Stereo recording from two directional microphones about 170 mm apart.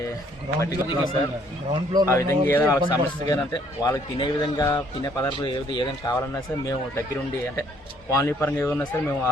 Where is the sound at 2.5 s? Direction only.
10° left (ahead or behind).